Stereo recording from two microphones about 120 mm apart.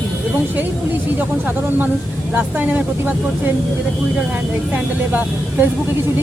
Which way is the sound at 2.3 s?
15° right (ahead or behind).